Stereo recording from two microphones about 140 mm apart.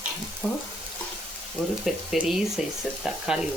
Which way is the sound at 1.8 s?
5° right (ahead or behind).